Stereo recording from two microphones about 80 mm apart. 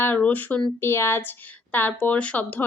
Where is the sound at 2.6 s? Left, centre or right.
Left.